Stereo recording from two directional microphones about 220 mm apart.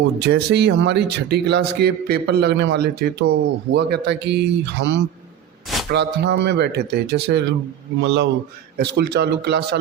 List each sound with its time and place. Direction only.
0.2 s a man's voice: 50° right (ahead or behind)